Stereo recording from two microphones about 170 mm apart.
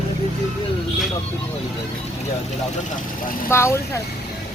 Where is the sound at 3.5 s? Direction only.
15° left (ahead or behind).